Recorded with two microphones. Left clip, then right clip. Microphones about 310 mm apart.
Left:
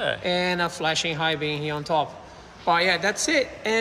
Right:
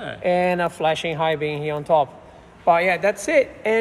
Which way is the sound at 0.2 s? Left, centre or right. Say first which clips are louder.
Right 4 dB; right.